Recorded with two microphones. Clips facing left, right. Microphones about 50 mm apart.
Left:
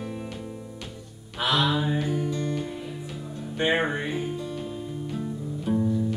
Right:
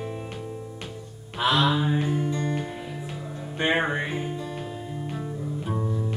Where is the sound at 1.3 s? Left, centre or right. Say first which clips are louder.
Right 2 dB; right.